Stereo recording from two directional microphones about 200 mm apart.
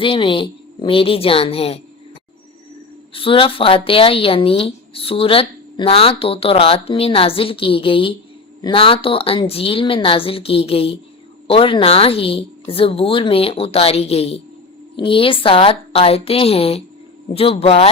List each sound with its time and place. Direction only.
0.0 s speech: 25° left (ahead or behind)
3.1 s speech: 25° left (ahead or behind)